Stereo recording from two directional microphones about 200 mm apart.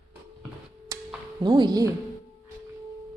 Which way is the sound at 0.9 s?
15° right (ahead or behind).